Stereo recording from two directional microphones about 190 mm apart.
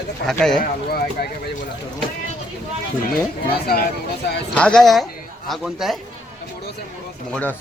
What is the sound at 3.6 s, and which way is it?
Speech, 55° left (ahead or behind).